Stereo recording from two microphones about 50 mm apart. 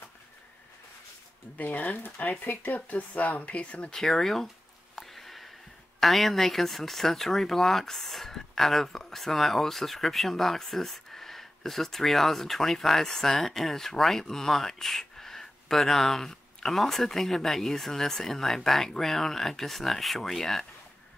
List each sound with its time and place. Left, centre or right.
1.6 s speech: left
3.9 s speech: centre
4.9 s a sound: centre
5.9 s speech: centre